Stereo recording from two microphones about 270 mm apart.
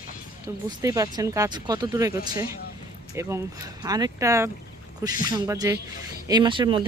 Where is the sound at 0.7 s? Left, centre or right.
Centre.